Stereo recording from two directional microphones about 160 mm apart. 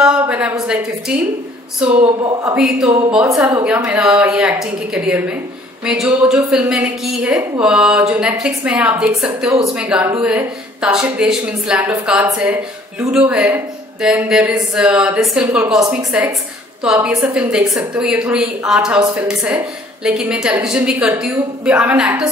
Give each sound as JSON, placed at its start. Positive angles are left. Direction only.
{"t": 0.0, "sound": "a woman's voice", "side_deg": -5}